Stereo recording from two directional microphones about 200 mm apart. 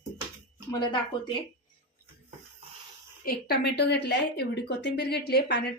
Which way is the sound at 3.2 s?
50° left (ahead or behind).